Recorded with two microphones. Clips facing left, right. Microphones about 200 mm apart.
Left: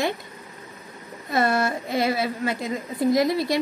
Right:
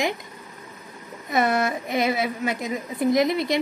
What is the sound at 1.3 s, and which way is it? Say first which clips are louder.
A woman's voice: even; 20° right (ahead or behind).